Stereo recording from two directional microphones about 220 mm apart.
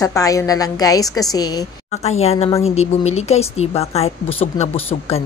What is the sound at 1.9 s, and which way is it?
A woman's voice, 30° left (ahead or behind).